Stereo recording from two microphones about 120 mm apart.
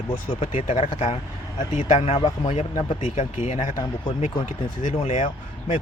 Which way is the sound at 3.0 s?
75° left (ahead or behind).